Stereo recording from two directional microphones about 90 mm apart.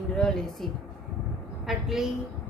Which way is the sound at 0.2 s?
5° left (ahead or behind).